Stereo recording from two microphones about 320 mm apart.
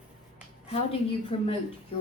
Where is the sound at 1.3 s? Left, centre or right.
Centre.